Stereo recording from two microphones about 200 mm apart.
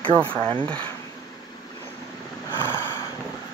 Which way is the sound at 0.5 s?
25° right (ahead or behind).